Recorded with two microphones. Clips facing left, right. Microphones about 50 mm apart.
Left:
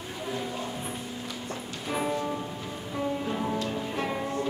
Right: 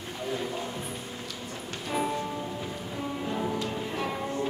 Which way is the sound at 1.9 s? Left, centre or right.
Centre.